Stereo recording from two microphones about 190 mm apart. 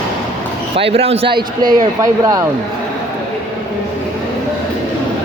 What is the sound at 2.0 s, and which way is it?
Speech, 20° right (ahead or behind).